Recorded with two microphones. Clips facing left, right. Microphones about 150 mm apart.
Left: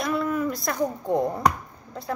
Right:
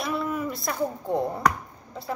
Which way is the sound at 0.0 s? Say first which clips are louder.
Left 3 dB; 5° right (ahead or behind).